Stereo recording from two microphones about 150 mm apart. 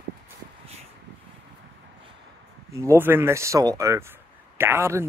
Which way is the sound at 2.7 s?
15° right (ahead or behind).